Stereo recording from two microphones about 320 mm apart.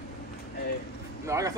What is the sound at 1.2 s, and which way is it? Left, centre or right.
Speech, centre.